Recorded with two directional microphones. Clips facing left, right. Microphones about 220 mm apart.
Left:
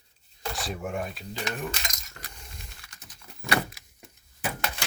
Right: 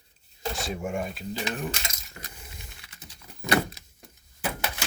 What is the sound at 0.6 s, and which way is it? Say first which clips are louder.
Speech: right 1 dB; centre (ahead or behind).